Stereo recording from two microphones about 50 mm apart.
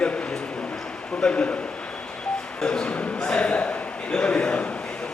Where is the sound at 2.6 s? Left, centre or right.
Centre.